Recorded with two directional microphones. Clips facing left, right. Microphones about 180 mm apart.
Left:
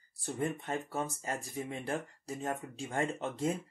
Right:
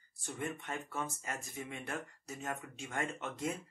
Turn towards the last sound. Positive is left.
turn(degrees=30)  # may be behind; listen again after turning